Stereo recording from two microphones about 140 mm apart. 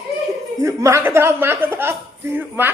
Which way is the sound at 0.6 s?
20° right (ahead or behind).